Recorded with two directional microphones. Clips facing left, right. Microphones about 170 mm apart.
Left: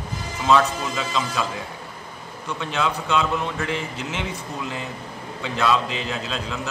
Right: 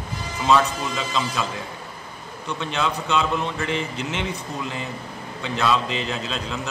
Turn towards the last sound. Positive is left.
turn(degrees=5)  # may be behind; listen again after turning